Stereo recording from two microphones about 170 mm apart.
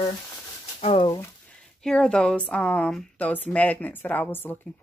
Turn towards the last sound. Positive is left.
turn(degrees=10)  # may be behind; listen again after turning